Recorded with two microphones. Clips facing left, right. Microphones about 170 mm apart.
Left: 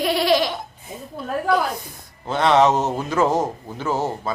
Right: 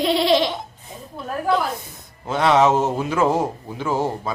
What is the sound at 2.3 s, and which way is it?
Speech, 5° right (ahead or behind).